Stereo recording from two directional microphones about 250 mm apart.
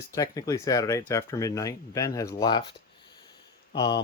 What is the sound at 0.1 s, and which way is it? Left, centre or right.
Speech, centre.